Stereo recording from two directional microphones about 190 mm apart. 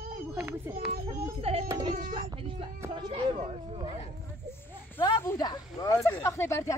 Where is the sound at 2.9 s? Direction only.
25° right (ahead or behind).